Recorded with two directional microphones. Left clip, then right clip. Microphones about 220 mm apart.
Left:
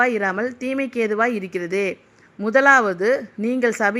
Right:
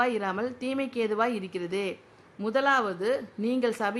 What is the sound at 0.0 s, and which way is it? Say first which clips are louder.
A woman's voice: left 8 dB; 15° left (ahead or behind).